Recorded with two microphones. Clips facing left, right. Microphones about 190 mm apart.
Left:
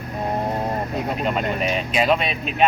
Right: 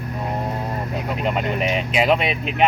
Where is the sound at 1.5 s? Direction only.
20° right (ahead or behind).